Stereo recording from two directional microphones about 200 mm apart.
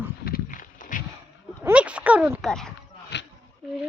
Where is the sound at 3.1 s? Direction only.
55° left (ahead or behind).